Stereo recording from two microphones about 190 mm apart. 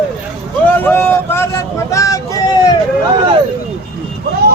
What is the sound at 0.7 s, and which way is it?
Vehicle, 10° left (ahead or behind).